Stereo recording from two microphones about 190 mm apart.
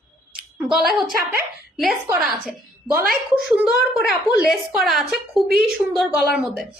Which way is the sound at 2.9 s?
50° right (ahead or behind).